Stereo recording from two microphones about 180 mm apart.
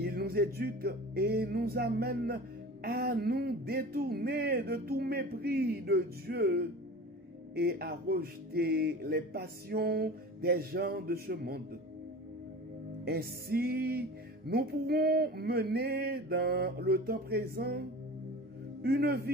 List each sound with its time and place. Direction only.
0.0 s music: 60° right (ahead or behind)
13.0 s music: 60° right (ahead or behind)